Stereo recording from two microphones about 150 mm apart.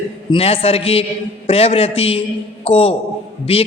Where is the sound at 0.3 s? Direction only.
40° left (ahead or behind).